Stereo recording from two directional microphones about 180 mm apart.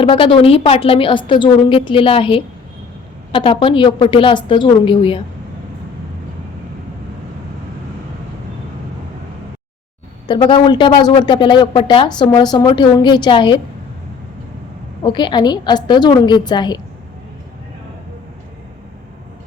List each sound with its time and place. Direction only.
0.0 s speech: 30° left (ahead or behind)
10.2 s speech: 25° left (ahead or behind)
15.0 s speech: 25° left (ahead or behind)